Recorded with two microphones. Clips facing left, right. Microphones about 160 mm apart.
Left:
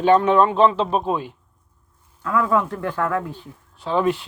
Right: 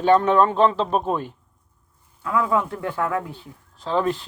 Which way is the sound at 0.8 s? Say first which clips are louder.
Left 1 dB; 45° right (ahead or behind).